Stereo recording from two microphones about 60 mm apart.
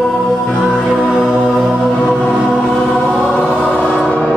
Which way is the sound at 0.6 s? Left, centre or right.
Centre.